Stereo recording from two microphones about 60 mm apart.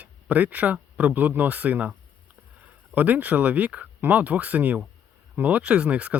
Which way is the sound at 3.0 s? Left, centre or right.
Right.